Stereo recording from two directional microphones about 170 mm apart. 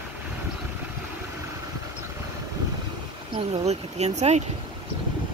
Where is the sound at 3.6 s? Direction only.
40° right (ahead or behind).